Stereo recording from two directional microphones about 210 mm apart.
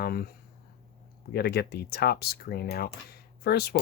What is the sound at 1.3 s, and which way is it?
Speech, 50° left (ahead or behind).